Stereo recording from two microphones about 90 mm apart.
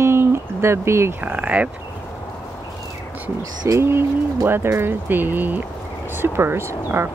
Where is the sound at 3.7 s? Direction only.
30° right (ahead or behind).